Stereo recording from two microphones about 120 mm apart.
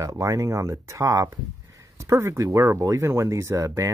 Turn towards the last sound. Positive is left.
turn(degrees=-25)  # may be behind; listen again after turning